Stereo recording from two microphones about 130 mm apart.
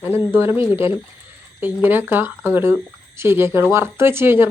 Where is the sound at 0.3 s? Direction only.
20° right (ahead or behind).